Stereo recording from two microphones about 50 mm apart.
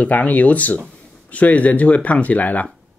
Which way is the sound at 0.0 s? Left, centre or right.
Left.